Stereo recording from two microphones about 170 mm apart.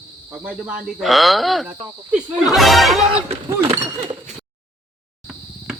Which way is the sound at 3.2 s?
35° right (ahead or behind).